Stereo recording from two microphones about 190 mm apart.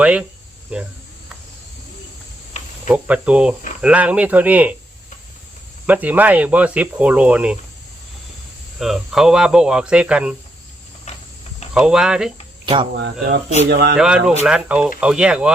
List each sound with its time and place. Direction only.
0.0 s speech: 5° right (ahead or behind)
2.9 s speech: 5° right (ahead or behind)
5.8 s speech: 10° right (ahead or behind)
8.8 s speech: centre (ahead or behind)
11.7 s speech: 5° right (ahead or behind)
12.6 s speech: 25° right (ahead or behind)
13.7 s speech: 60° right (ahead or behind)
13.9 s speech: 5° right (ahead or behind)